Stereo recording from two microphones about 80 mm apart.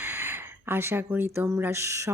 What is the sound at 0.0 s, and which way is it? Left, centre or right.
Speech, right.